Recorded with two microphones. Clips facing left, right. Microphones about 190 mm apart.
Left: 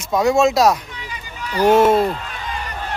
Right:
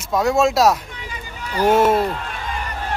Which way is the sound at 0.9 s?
50° right (ahead or behind).